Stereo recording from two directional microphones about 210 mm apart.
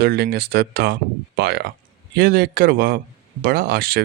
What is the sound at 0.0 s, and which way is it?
Speech, 50° right (ahead or behind).